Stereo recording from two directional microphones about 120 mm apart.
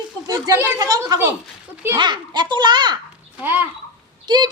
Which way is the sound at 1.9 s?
40° right (ahead or behind).